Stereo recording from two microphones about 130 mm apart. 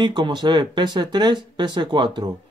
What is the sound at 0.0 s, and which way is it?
Speech, 35° right (ahead or behind).